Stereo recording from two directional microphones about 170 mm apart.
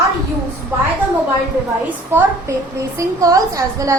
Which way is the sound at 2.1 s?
15° right (ahead or behind).